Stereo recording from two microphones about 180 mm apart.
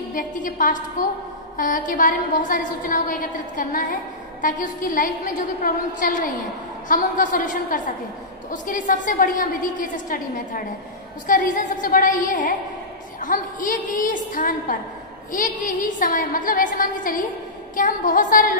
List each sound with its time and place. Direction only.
0.1 s a woman's voice: 50° left (ahead or behind)